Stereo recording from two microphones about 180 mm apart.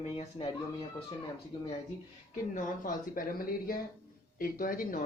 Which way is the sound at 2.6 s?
50° left (ahead or behind).